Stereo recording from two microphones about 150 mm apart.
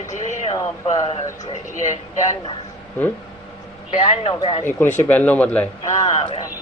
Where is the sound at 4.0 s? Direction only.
35° left (ahead or behind).